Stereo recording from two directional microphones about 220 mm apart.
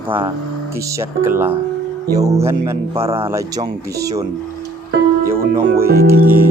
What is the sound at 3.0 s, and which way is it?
Speech, 25° right (ahead or behind).